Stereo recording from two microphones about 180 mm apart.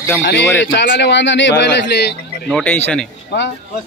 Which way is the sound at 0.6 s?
75° left (ahead or behind).